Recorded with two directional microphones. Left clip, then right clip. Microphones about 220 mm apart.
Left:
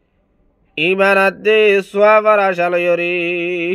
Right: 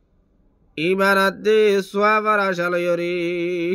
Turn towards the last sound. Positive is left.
turn(degrees=-15)  # may be behind; listen again after turning